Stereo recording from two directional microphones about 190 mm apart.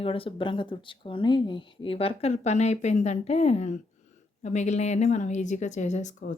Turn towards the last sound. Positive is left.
turn(degrees=40)  # may be behind; listen again after turning